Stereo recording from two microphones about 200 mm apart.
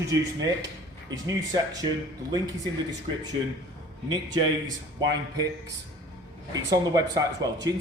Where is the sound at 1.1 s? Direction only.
20° right (ahead or behind).